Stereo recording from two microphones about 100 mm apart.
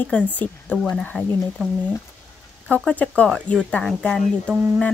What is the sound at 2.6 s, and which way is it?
Speech, 10° left (ahead or behind).